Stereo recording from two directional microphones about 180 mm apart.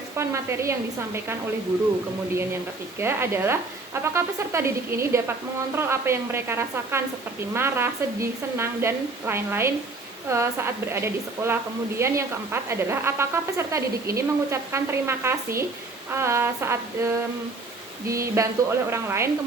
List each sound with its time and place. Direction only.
0.2 s speech: 15° right (ahead or behind)
3.0 s speech: 15° right (ahead or behind)